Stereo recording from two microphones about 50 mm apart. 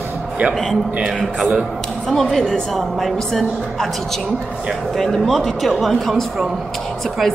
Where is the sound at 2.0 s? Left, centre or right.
Centre.